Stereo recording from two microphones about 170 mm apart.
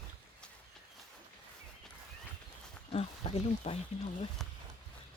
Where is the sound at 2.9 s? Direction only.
35° left (ahead or behind).